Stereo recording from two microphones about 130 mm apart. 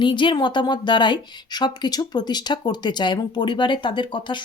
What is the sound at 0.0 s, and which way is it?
Speech, 40° left (ahead or behind).